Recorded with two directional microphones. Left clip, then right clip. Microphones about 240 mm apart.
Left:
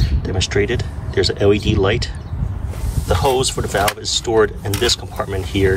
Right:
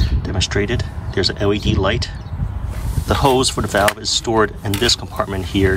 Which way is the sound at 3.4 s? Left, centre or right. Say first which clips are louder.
Right 2 dB; centre.